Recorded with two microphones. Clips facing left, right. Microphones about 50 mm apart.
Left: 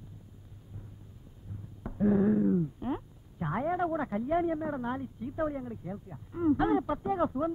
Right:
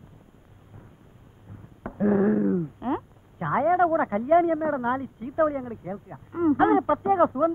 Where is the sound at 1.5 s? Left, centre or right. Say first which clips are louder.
Right 5 dB; right.